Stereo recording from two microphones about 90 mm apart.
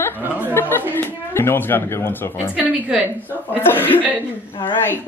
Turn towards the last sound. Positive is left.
turn(degrees=25)  # may be behind; listen again after turning